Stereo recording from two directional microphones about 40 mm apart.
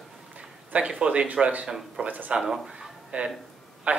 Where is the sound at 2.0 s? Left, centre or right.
Right.